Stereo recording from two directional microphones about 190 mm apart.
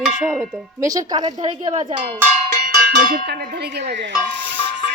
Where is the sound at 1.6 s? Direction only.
35° right (ahead or behind).